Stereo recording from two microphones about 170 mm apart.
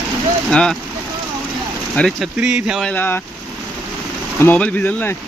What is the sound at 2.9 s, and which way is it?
Speech, 10° left (ahead or behind).